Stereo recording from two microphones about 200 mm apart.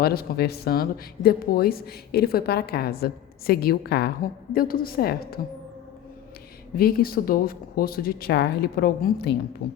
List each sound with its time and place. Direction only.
0.0 s a woman's voice: 50° left (ahead or behind)
6.7 s a woman's voice: 45° left (ahead or behind)